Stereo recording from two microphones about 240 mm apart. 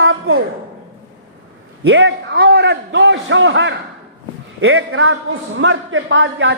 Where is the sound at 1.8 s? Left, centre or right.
Right.